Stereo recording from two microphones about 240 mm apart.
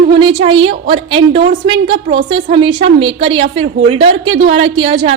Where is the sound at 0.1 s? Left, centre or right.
Centre.